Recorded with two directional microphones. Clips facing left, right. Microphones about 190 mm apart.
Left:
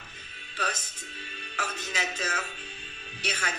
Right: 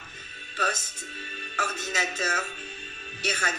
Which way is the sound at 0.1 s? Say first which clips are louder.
Right 3 dB; 45° right (ahead or behind).